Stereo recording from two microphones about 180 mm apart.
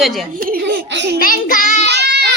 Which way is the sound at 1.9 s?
65° right (ahead or behind).